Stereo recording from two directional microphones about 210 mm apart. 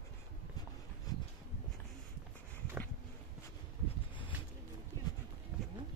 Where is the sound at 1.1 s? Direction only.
15° left (ahead or behind).